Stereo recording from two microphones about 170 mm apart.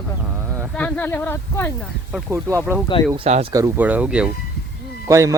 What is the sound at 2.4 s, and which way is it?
Speech, 15° right (ahead or behind).